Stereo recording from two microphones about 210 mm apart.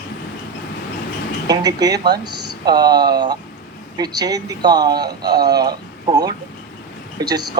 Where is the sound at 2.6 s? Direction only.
20° right (ahead or behind).